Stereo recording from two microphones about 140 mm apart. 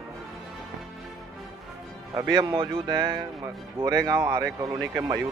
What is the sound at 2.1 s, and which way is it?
Speech, 30° right (ahead or behind).